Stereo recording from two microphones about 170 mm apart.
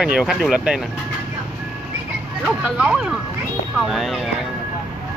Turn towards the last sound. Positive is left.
turn(degrees=0)  # may be behind; listen again after turning